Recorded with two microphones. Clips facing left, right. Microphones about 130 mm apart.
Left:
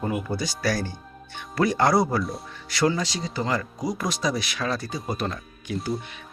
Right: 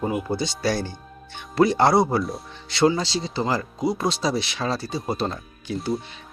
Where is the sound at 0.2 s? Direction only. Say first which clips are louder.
Right 3 dB; 25° right (ahead or behind).